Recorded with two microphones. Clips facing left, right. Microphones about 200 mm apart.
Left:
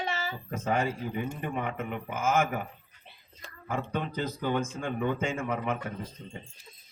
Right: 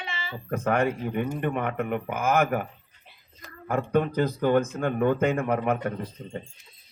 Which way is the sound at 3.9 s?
55° right (ahead or behind).